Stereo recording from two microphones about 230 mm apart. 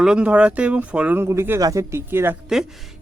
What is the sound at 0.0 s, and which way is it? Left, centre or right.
Speech, centre.